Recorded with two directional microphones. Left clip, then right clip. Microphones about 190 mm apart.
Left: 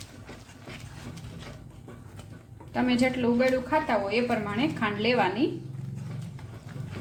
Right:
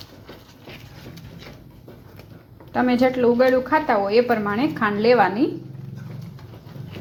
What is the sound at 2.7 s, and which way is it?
A woman's voice, 25° right (ahead or behind).